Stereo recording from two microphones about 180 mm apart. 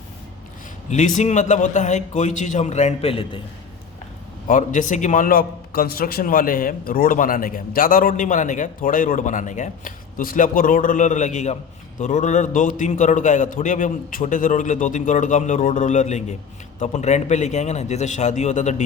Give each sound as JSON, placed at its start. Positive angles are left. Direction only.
{"t": 0.9, "sound": "a man's voice", "side_deg": 45}
{"t": 4.4, "sound": "a man's voice", "side_deg": 45}